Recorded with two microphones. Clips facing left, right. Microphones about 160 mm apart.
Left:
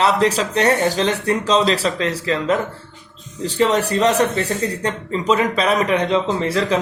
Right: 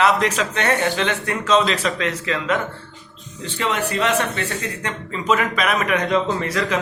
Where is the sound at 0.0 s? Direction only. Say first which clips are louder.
Left 2 dB; 35° left (ahead or behind).